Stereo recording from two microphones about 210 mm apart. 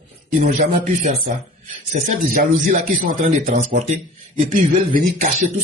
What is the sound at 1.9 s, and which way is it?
Speech, 35° right (ahead or behind).